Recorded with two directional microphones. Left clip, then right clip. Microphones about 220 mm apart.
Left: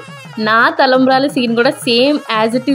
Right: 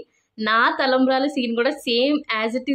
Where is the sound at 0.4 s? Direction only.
25° left (ahead or behind).